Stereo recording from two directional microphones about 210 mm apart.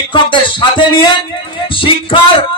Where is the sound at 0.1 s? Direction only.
25° left (ahead or behind).